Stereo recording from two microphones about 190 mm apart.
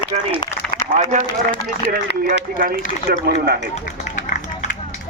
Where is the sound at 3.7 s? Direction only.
40° left (ahead or behind).